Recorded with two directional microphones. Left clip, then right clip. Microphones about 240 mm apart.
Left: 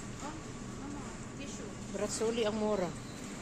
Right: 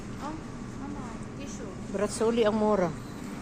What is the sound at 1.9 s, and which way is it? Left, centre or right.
Speech, right.